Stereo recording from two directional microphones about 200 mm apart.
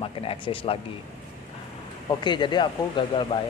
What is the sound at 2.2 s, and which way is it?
Speech, 20° left (ahead or behind).